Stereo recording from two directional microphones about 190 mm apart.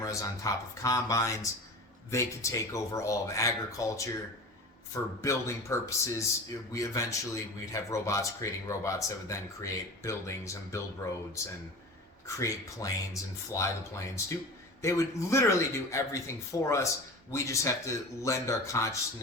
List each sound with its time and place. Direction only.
0.0 s speech: 15° left (ahead or behind)
5.2 s speech: 15° left (ahead or behind)
12.4 s speech: 15° left (ahead or behind)